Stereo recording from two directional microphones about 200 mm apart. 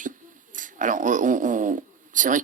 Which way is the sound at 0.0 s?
40° right (ahead or behind).